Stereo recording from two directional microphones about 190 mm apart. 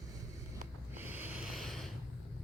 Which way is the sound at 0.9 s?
10° right (ahead or behind).